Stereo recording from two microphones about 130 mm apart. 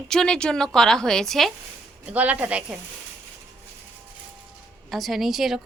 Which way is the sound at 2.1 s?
10° right (ahead or behind).